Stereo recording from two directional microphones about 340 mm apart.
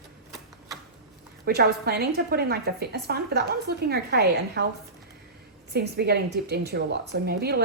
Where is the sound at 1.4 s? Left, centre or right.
Right.